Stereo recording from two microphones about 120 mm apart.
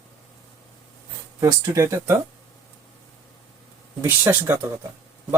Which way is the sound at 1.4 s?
25° right (ahead or behind).